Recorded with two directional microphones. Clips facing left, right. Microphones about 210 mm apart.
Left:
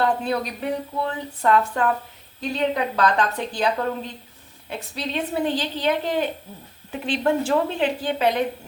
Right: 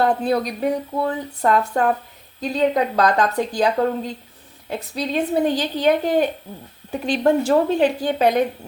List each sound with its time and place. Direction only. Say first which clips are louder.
0.0 s speech: right 4 dB; 35° right (ahead or behind)
4.7 s a woman's voice: right 5 dB; 45° right (ahead or behind)